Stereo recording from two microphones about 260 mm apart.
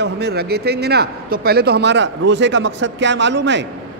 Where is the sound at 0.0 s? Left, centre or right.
Right.